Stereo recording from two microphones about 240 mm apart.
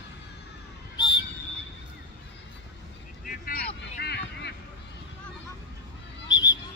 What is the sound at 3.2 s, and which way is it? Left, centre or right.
Vehicle, left.